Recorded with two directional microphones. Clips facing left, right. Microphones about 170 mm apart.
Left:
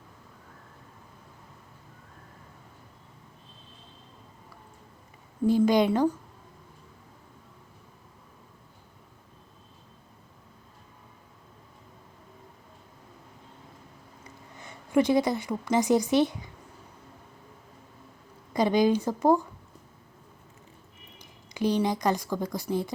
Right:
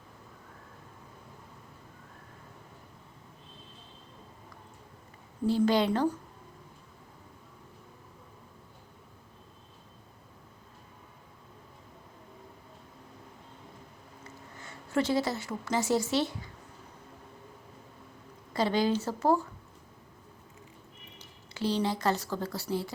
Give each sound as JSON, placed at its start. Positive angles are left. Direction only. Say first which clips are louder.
{"t": 5.5, "sound": "a woman's voice", "louder": "left 4 dB", "side_deg": 15}
{"t": 14.6, "sound": "a woman's voice", "louder": "left 6 dB", "side_deg": 15}
{"t": 18.5, "sound": "a woman's voice", "louder": "left 5 dB", "side_deg": 15}
{"t": 21.2, "sound": "speech", "louder": "left 5 dB", "side_deg": 15}